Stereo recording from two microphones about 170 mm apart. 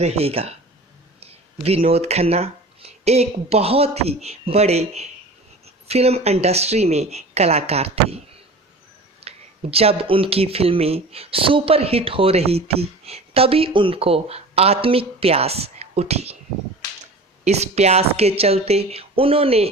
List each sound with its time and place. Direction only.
0.0 s speech: 35° right (ahead or behind)
1.6 s speech: 35° right (ahead or behind)
9.2 s speech: 35° right (ahead or behind)
17.4 s speech: 40° right (ahead or behind)